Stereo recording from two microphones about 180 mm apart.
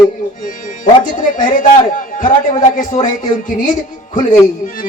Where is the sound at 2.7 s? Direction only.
45° left (ahead or behind).